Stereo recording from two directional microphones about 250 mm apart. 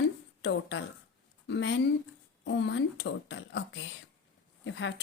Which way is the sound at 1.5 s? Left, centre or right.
Left.